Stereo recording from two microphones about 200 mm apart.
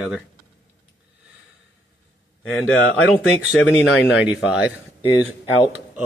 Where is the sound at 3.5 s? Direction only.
Centre (ahead or behind).